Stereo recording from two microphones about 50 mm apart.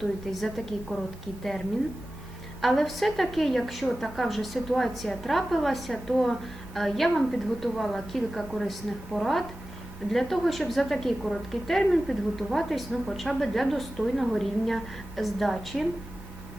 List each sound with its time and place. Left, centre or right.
0.0 s a woman's voice: centre
2.6 s a woman's voice: centre